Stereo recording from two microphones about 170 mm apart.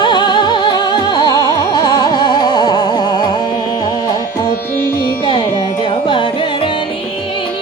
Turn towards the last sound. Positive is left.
turn(degrees=30)  # may be behind; listen again after turning